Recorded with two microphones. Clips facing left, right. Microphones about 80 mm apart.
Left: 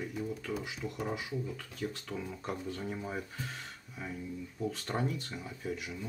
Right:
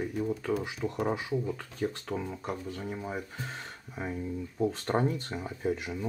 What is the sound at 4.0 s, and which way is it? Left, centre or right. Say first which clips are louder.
Speech: right 6 dB; right.